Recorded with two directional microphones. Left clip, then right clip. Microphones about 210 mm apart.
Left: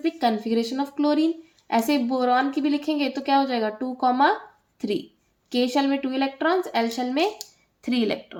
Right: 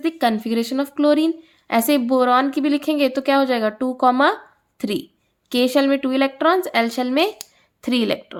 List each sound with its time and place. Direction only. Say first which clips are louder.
0.0 s speech: right 3 dB; 45° right (ahead or behind)